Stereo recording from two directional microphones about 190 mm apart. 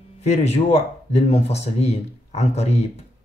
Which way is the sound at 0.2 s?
35° left (ahead or behind).